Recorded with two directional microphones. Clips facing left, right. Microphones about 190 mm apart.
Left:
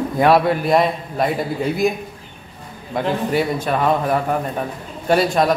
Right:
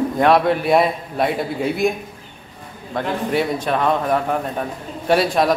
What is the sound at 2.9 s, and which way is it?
A man's voice, centre (ahead or behind).